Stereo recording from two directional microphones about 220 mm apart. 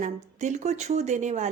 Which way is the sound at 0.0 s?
35° right (ahead or behind).